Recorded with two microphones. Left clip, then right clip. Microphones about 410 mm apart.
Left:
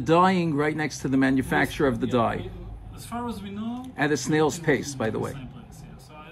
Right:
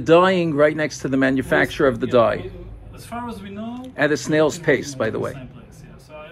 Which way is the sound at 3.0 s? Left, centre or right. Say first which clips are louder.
Right 2 dB; centre.